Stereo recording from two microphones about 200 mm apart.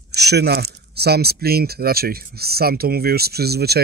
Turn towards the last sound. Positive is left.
turn(degrees=-55)  # may be behind; listen again after turning